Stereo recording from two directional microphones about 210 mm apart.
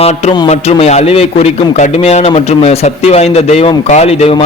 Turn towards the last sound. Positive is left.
turn(degrees=30)  # may be behind; listen again after turning